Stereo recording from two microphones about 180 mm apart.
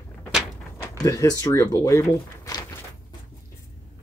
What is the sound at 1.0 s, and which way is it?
Speech, 15° left (ahead or behind).